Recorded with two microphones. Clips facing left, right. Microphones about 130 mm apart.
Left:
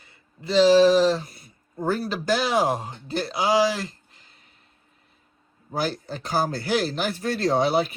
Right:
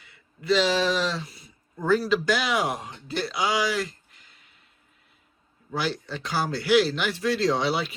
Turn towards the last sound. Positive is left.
turn(degrees=45)  # may be behind; listen again after turning